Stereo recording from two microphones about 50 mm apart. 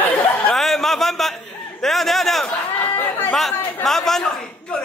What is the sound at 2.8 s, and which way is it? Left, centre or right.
Chatter, left.